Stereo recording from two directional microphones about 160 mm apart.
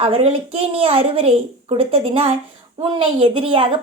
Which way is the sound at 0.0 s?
35° right (ahead or behind).